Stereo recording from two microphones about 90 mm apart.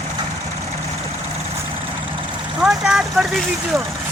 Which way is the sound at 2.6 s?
5° right (ahead or behind).